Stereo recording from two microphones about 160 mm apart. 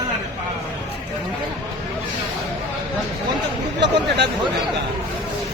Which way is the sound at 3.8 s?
90° right.